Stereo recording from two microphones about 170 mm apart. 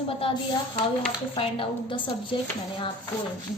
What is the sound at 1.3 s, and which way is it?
A woman's voice, 30° left (ahead or behind).